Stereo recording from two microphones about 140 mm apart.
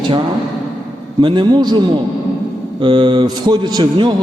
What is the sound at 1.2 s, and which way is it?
Speech, 35° right (ahead or behind).